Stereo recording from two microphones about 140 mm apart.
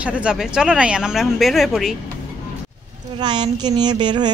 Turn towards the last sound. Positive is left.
turn(degrees=-30)  # may be behind; listen again after turning